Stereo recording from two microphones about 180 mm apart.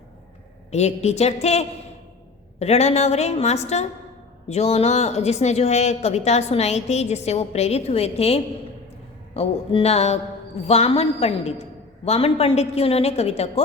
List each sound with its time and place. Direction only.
0.7 s a woman's voice: 40° left (ahead or behind)